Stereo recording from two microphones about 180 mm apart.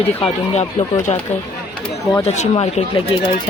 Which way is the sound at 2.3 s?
35° left (ahead or behind).